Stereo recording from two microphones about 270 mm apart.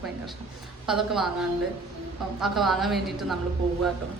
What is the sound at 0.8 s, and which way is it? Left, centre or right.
Speech, centre.